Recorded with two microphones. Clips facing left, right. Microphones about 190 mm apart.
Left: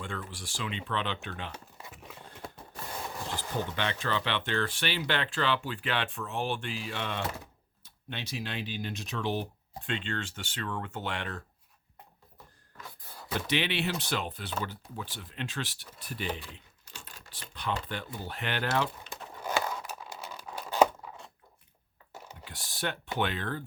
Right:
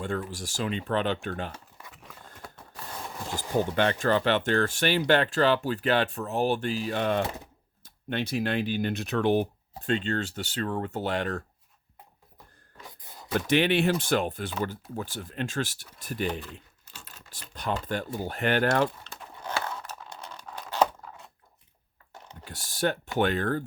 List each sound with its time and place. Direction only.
0.0 s speech: 40° right (ahead or behind)
1.5 s a sound: 25° left (ahead or behind)
3.2 s speech: 10° right (ahead or behind)
3.7 s speech: 45° right (ahead or behind)
12.8 s beatboxing: 20° right (ahead or behind)
13.5 s speech: 45° right (ahead or behind)
19.0 s tearing: 10° left (ahead or behind)
22.1 s a sound: 5° left (ahead or behind)
22.4 s typing: 45° right (ahead or behind)
23.1 s speech: 45° right (ahead or behind)